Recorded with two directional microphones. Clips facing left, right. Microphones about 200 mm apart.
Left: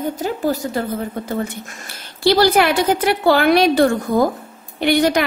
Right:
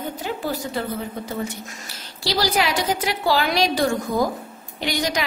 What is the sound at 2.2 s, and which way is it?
A woman's voice, 55° left (ahead or behind).